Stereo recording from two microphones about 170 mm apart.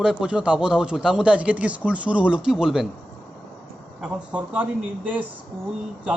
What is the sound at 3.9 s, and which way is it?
Speech, 5° right (ahead or behind).